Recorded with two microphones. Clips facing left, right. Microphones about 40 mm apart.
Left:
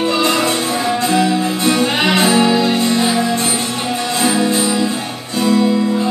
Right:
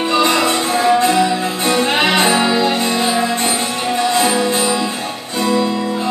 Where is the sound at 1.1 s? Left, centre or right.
Centre.